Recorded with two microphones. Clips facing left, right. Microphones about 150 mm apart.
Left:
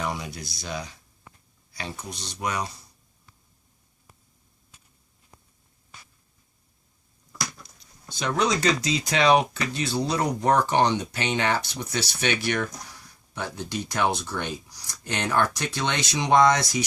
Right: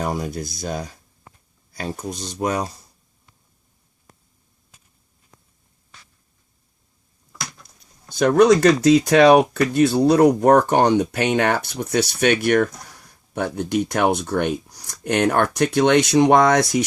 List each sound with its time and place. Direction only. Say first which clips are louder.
0.0 s speech: right 6 dB; 45° right (ahead or behind)
8.1 s speech: right 11 dB; 55° right (ahead or behind)